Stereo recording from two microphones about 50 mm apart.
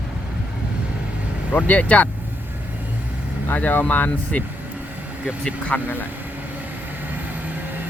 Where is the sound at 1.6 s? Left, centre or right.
Left.